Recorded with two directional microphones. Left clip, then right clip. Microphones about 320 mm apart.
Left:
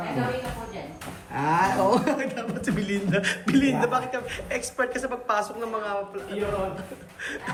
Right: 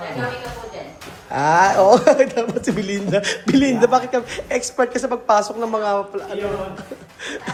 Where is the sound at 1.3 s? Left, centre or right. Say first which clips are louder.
Right 9 dB; centre.